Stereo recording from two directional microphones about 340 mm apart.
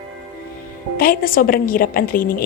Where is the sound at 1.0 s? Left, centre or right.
Left.